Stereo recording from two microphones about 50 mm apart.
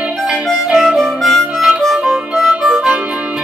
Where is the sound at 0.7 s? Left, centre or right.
Centre.